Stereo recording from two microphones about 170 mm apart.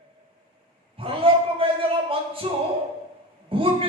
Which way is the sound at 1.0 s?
30° right (ahead or behind).